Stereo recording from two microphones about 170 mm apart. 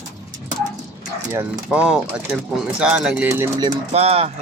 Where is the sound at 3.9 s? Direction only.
35° right (ahead or behind).